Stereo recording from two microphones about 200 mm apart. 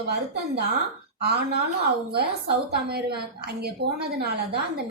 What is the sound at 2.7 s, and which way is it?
A woman's voice, 55° right (ahead or behind).